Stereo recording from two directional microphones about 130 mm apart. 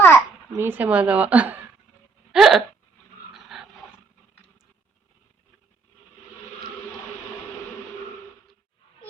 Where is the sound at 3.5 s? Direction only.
5° right (ahead or behind).